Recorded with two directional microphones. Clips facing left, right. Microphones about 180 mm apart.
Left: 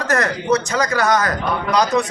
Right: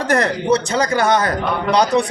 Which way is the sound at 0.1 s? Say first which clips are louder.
Right 2 dB; 30° right (ahead or behind).